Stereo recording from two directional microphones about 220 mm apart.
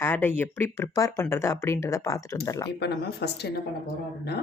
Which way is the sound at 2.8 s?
50° left (ahead or behind).